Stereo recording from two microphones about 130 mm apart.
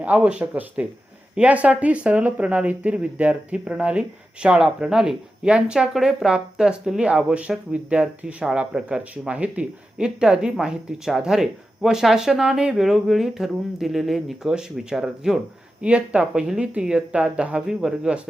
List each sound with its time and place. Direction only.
0.0 s speech: 10° right (ahead or behind)